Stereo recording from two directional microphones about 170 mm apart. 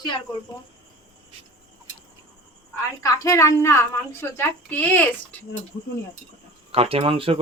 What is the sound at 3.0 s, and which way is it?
A child's voice, 20° left (ahead or behind).